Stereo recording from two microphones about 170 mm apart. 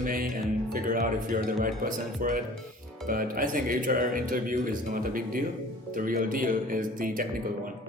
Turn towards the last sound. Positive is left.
turn(degrees=-55)  # may be behind; listen again after turning